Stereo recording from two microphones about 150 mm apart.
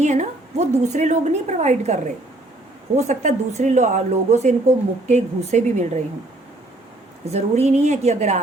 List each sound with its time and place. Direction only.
0.0 s a woman's voice: 50° right (ahead or behind)
7.3 s a woman's voice: 45° right (ahead or behind)